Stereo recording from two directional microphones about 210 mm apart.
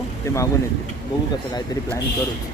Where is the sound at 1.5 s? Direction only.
20° left (ahead or behind).